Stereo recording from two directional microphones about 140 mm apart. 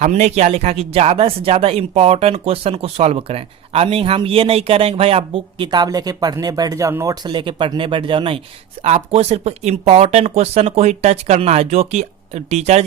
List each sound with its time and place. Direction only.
0.0 s speech: 55° right (ahead or behind); by 7.2 s 20° right (ahead or behind)
7.3 s speech: 35° right (ahead or behind)
8.8 s speech: 50° right (ahead or behind)